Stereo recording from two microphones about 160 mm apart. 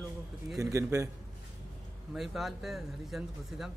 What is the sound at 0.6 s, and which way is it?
Speech, 20° right (ahead or behind).